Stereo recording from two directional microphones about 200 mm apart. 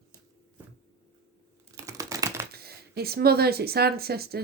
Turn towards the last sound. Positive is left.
turn(degrees=-50)  # may be behind; listen again after turning